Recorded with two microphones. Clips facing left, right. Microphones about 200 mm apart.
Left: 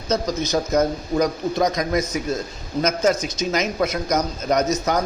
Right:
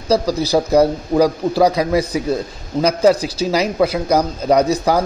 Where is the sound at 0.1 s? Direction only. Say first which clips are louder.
Right 6 dB; 35° right (ahead or behind).